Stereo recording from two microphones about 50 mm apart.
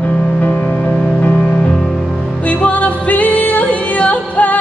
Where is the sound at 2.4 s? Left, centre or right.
Left.